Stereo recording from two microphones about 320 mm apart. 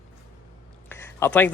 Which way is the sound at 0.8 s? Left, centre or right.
Centre.